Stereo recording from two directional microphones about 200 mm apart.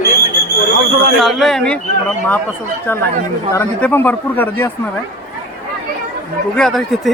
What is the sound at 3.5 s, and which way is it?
A man's voice, 10° left (ahead or behind).